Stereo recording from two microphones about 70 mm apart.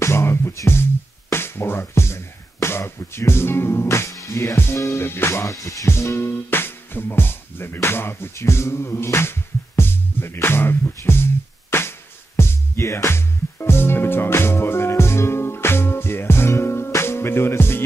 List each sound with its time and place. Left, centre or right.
0.0 s music: left
4.1 s music: left
5.0 s music: left
5.9 s speech: left
10.4 s music: left